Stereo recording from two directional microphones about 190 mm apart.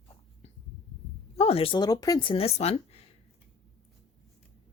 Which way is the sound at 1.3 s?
30° left (ahead or behind).